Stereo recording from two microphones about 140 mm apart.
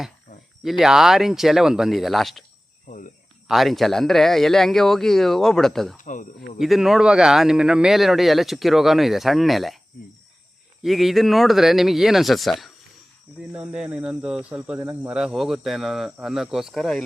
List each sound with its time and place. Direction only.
0.6 s speech: centre (ahead or behind)
2.8 s cricket: 65° left (ahead or behind)
3.5 s speech: centre (ahead or behind)
6.0 s speech: 65° left (ahead or behind)
6.6 s speech: centre (ahead or behind)
10.8 s speech: centre (ahead or behind)